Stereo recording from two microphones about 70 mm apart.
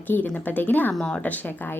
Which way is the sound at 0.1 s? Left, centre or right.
Left.